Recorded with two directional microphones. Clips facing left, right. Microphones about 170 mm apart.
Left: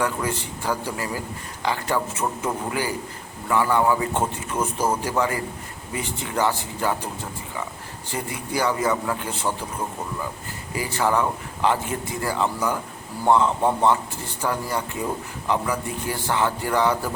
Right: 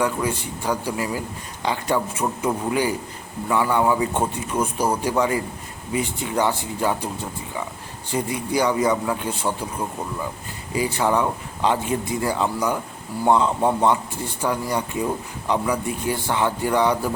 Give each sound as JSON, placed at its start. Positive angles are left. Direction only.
{"t": 0.0, "sound": "a man's voice", "side_deg": -15}
{"t": 8.1, "sound": "a man's voice", "side_deg": -15}
{"t": 10.7, "sound": "a man's voice", "side_deg": -20}